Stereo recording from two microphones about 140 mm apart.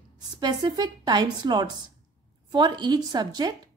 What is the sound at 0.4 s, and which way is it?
A woman's voice, 30° right (ahead or behind).